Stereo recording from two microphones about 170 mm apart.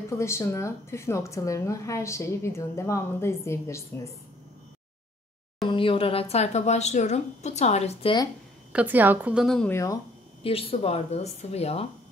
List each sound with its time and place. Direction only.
0.2 s a woman's voice: 15° left (ahead or behind)
5.7 s speech: 30° left (ahead or behind)
8.7 s a woman's voice: 10° right (ahead or behind)
9.7 s a woman's voice: 15° left (ahead or behind)
10.4 s speech: 35° left (ahead or behind)